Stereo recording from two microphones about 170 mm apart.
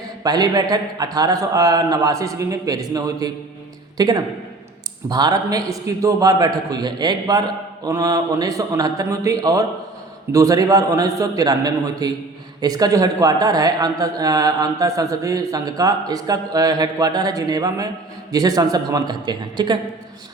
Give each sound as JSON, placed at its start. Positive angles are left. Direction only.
{"t": 0.2, "sound": "a man's voice", "side_deg": -20}